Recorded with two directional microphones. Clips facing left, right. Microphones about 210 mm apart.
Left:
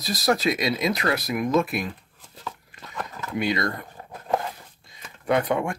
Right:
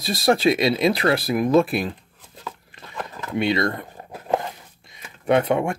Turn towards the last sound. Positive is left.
turn(degrees=-25)  # may be behind; listen again after turning